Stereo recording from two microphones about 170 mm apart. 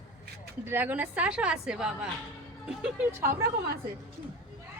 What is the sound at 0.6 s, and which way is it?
A woman's voice, 10° right (ahead or behind).